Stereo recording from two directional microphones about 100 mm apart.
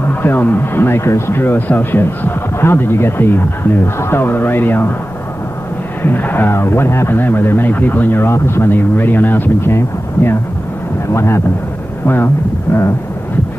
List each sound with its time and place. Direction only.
0.1 s speech: 20° left (ahead or behind)
6.0 s speech: 20° left (ahead or behind)